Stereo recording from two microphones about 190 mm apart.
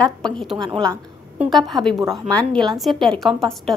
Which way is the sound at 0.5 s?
25° right (ahead or behind).